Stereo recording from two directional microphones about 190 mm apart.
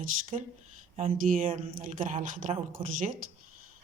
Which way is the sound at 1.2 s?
45° right (ahead or behind).